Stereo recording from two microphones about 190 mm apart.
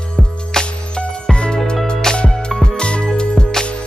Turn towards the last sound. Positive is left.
turn(degrees=5)  # may be behind; listen again after turning